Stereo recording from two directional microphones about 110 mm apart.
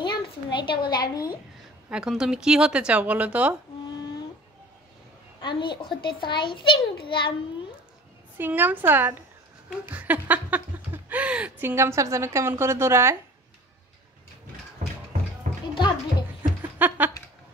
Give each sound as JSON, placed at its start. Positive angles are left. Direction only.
{"t": 0.0, "sound": "a sound", "side_deg": 45}
{"t": 1.9, "sound": "speech", "side_deg": -5}
{"t": 5.4, "sound": "a child's voice", "side_deg": 45}
{"t": 8.4, "sound": "a woman's voice", "side_deg": -15}
{"t": 15.5, "sound": "bathtub", "side_deg": -90}
{"t": 16.7, "sound": "a sound", "side_deg": -15}